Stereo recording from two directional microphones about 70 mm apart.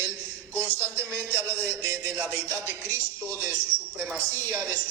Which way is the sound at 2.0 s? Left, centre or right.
Right.